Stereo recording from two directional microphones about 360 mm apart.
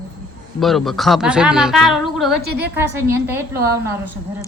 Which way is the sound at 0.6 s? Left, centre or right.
Centre.